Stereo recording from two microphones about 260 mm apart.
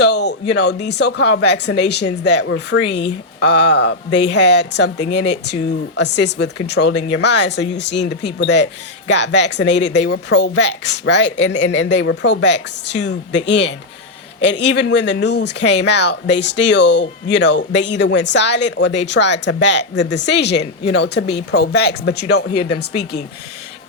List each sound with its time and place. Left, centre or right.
0.0 s speech: left